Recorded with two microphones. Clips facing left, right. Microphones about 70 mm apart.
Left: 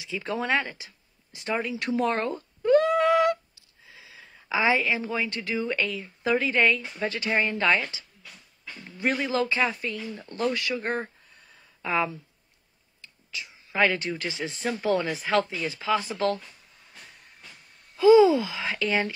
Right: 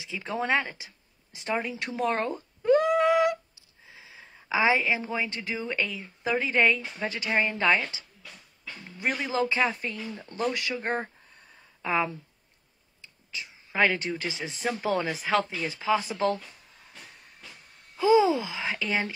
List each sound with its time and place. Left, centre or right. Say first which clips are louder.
0.0 s speech: left 1 dB; centre
2.0 s a sound: left 1 dB; centre
6.3 s speech: left 1 dB; centre
9.2 s speech: right 1 dB; centre
14.7 s speech: left 2 dB; centre
15.6 s speech: even; right
17.9 s speech: left 5 dB; right